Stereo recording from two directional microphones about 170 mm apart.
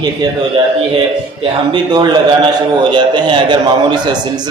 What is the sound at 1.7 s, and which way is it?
A man's voice, 25° right (ahead or behind).